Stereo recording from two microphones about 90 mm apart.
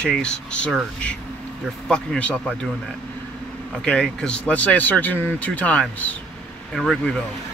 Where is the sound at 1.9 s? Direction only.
15° left (ahead or behind).